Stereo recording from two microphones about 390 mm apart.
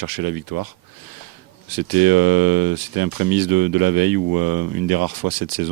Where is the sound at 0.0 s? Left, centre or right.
Right.